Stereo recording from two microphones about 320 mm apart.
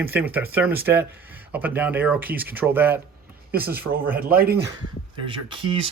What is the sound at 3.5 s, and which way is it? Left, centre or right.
Speech, right.